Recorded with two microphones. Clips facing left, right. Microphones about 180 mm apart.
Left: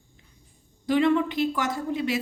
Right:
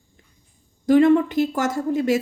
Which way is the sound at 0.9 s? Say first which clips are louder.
Right 7 dB; 45° right (ahead or behind).